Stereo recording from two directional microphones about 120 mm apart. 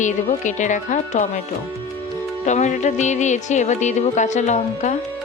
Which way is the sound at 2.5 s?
85° left.